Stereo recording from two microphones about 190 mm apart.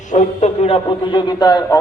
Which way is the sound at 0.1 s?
35° left (ahead or behind).